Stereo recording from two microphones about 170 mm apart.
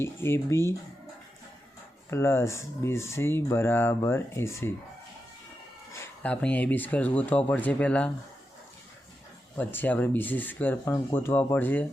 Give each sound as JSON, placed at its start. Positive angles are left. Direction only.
{"t": 0.0, "sound": "speech", "side_deg": 15}
{"t": 2.0, "sound": "speech", "side_deg": 15}
{"t": 5.9, "sound": "speech", "side_deg": 10}
{"t": 9.6, "sound": "speech", "side_deg": 10}